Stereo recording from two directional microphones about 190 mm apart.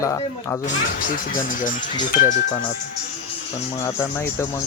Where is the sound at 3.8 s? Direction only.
15° left (ahead or behind).